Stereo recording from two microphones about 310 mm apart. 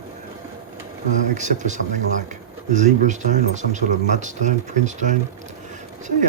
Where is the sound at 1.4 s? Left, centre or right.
Right.